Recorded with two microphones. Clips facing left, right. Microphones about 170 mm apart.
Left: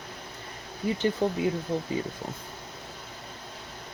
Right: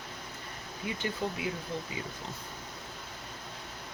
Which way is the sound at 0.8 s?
35° left (ahead or behind).